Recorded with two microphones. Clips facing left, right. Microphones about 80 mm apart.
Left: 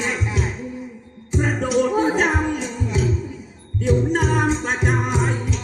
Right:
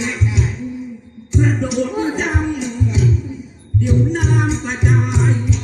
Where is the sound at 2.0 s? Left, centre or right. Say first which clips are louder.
Left 1 dB; left.